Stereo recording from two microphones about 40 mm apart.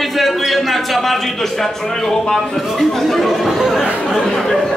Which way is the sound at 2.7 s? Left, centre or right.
Centre.